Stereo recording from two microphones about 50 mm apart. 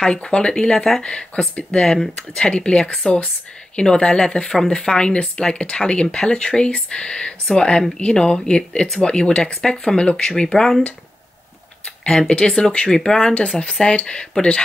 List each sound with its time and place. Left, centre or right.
0.0 s speech: centre
1.0 s speech: left
12.1 s speech: centre